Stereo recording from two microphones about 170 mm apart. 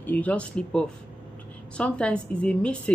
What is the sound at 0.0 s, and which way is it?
Speech, 10° left (ahead or behind).